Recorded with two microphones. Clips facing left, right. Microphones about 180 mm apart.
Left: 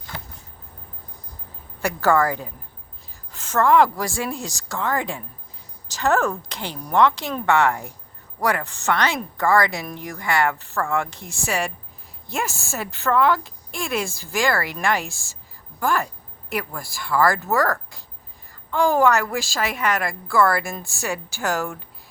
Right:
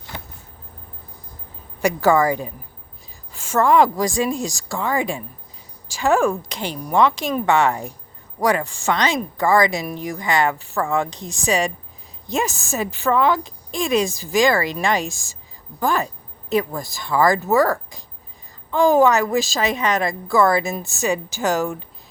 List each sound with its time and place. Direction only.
1.8 s a woman's voice: 15° right (ahead or behind)